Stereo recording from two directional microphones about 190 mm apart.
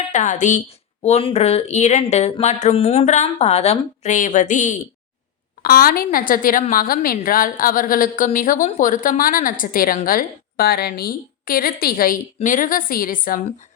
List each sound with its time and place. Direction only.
0.1 s speech: 40° left (ahead or behind)
5.6 s a woman's voice: 50° left (ahead or behind)